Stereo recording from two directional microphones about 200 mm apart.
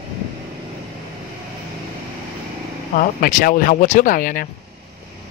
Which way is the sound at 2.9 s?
45° left (ahead or behind).